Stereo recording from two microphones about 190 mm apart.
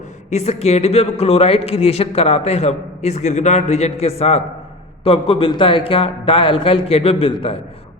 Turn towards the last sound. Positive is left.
turn(degrees=30)  # may be behind; listen again after turning